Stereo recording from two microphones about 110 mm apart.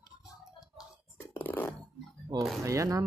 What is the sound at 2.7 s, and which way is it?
Speech, 30° right (ahead or behind).